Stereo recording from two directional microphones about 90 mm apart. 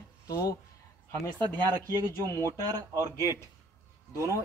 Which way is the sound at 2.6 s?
40° right (ahead or behind).